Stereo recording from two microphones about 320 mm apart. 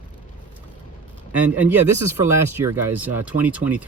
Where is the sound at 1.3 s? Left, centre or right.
Centre.